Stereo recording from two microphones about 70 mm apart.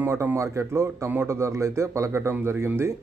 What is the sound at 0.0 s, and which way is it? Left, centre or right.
A man's voice, right.